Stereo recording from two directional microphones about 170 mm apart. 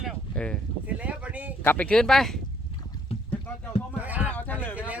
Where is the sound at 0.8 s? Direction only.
10° right (ahead or behind).